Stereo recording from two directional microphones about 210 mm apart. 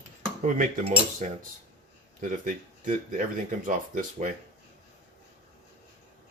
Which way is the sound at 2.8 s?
40° right (ahead or behind).